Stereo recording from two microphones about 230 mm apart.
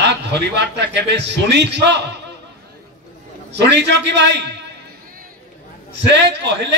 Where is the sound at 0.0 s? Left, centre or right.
Right.